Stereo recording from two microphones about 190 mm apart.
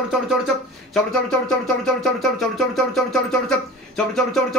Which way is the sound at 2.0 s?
Centre (ahead or behind).